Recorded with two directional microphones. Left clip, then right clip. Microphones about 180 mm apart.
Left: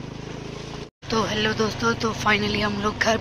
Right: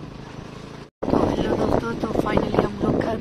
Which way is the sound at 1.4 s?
5° right (ahead or behind).